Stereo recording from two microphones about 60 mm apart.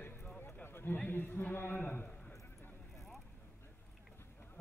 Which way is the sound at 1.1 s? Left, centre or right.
Left.